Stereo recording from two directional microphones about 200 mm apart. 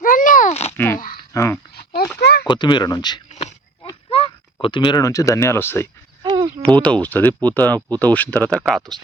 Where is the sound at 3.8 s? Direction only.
25° left (ahead or behind).